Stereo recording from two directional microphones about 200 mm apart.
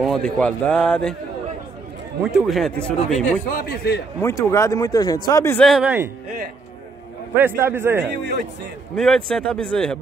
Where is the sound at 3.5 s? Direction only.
50° left (ahead or behind).